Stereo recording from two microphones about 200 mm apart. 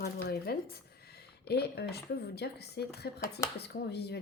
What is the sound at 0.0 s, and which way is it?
A woman's voice, 50° left (ahead or behind).